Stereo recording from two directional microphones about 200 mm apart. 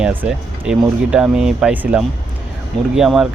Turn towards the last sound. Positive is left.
turn(degrees=-5)  # may be behind; listen again after turning